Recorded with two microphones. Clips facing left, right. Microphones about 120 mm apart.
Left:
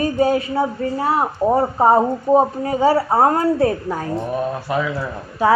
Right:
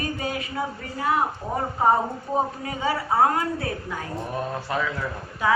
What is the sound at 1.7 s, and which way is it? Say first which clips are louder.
A woman's voice: left 7 dB; 40° left (ahead or behind).